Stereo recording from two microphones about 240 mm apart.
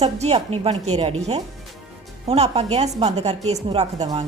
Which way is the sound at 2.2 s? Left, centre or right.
Right.